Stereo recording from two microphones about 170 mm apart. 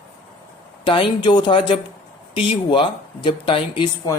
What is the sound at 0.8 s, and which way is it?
Speech, 30° left (ahead or behind).